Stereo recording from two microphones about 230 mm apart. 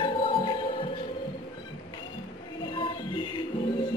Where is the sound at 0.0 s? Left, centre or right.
Left.